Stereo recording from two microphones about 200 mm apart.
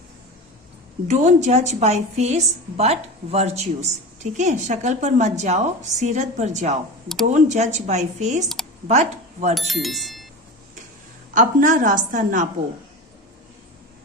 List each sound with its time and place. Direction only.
1.0 s a woman's voice: 35° right (ahead or behind)
9.6 s speech: centre (ahead or behind)
11.3 s a woman's voice: 40° right (ahead or behind)